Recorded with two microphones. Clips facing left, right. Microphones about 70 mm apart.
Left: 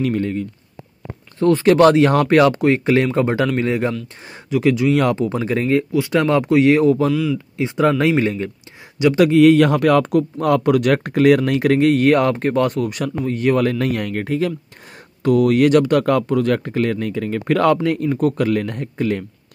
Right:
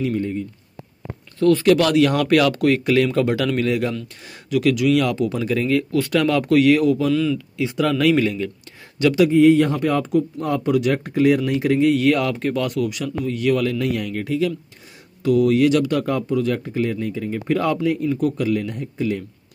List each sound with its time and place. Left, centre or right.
0.0 s speech: left
1.4 s speech: left
5.9 s speech: centre
6.1 s speech: left
7.1 s speech: centre
7.5 s speech: left
9.2 s speech: left
17.8 s speech: left